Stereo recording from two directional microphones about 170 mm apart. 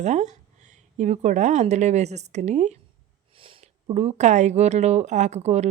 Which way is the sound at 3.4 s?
30° right (ahead or behind).